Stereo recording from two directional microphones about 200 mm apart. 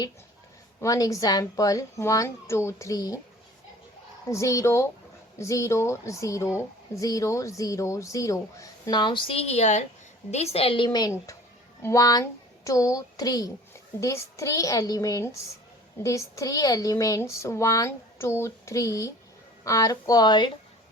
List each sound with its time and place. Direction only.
0.8 s speech: 15° left (ahead or behind)
4.3 s a woman's voice: 15° left (ahead or behind)